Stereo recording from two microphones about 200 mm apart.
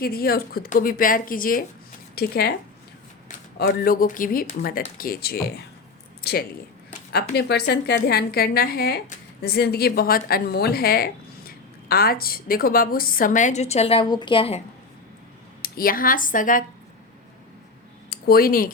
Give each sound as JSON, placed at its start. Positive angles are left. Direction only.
{"t": 0.0, "sound": "a woman's voice", "side_deg": 50}
{"t": 3.6, "sound": "a woman's voice", "side_deg": 45}
{"t": 15.6, "sound": "a woman's voice", "side_deg": 45}
{"t": 18.1, "sound": "speech", "side_deg": 50}